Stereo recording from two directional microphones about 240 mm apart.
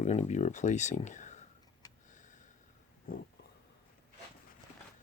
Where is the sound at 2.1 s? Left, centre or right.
Left.